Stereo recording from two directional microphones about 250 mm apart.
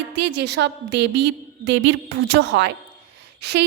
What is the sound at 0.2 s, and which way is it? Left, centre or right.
A woman's voice, right.